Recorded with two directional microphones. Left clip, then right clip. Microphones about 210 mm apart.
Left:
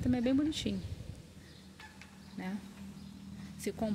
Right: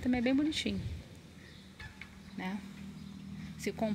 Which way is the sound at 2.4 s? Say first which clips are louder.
Right 3 dB; centre (ahead or behind).